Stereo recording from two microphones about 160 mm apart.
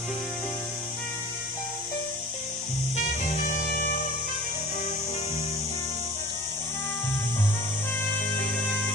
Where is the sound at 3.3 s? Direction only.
55° left (ahead or behind).